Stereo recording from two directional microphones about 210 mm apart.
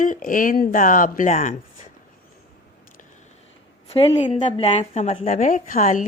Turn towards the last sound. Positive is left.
turn(degrees=35)  # may be behind; listen again after turning